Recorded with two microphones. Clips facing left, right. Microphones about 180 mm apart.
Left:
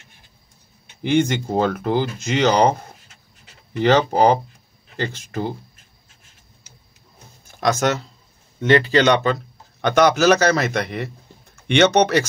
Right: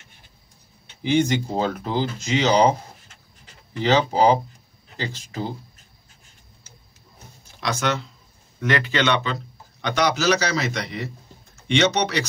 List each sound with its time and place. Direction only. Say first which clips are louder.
1.0 s speech: left 2 dB; 55° left (ahead or behind)
7.4 s speech: left 5 dB; 45° left (ahead or behind)
8.5 s speech: left 7 dB; 30° left (ahead or behind); by 12.3 s 50° left (ahead or behind)